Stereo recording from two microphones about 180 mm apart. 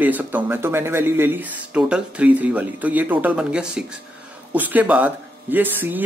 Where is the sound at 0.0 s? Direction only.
10° right (ahead or behind).